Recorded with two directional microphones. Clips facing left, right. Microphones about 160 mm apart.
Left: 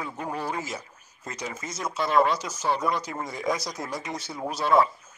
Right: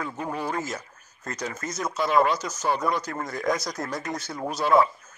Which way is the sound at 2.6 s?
Centre (ahead or behind).